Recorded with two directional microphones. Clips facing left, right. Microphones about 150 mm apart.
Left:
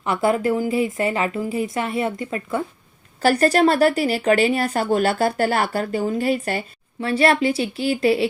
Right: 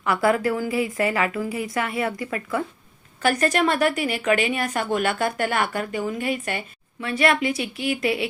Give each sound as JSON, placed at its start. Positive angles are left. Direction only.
{"t": 0.0, "sound": "a woman's voice", "side_deg": 25}